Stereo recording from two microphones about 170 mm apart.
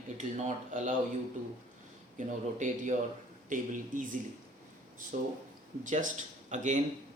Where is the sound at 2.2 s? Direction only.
50° right (ahead or behind).